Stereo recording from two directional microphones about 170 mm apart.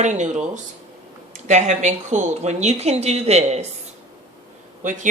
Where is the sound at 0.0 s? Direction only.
45° right (ahead or behind).